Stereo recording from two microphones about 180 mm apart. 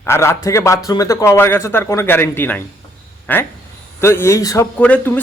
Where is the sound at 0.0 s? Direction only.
15° left (ahead or behind).